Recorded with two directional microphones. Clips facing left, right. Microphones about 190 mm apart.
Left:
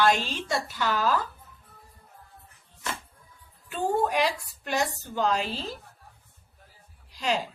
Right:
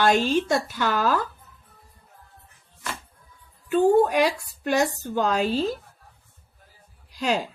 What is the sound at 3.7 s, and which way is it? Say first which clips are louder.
A woman's voice: right 8 dB; 50° right (ahead or behind).